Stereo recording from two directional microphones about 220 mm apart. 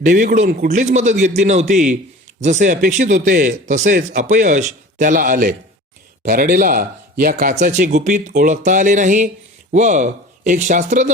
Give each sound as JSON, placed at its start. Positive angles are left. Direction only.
{"t": 0.0, "sound": "speech", "side_deg": -35}